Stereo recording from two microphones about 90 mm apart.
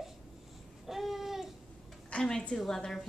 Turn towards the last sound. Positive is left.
turn(degrees=5)  # may be behind; listen again after turning